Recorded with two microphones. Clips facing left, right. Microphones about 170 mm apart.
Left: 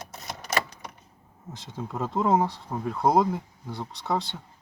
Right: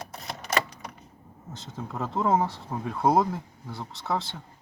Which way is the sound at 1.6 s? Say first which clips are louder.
Left 2 dB; centre (ahead or behind).